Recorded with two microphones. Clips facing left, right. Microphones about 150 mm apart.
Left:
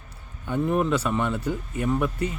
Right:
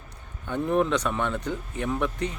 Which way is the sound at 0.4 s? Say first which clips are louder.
Left 1 dB; 5° left (ahead or behind).